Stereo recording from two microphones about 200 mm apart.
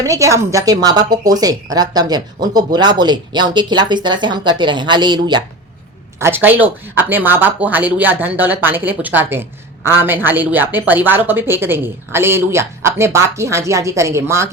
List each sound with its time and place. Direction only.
0.0 s a woman's voice: 15° right (ahead or behind)
6.1 s speech: 10° right (ahead or behind)